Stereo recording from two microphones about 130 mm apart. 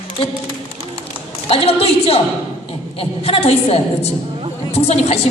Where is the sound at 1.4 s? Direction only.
50° left (ahead or behind).